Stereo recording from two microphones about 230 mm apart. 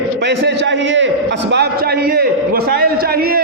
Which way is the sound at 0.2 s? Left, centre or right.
Right.